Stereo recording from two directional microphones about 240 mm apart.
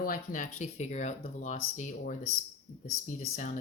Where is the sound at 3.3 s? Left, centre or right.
Left.